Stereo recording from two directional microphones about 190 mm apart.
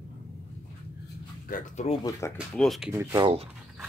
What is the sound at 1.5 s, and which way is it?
Speech, 35° left (ahead or behind).